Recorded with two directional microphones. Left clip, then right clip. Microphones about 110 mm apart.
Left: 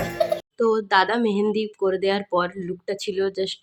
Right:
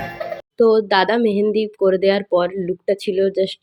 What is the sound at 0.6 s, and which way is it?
Speech, 25° right (ahead or behind).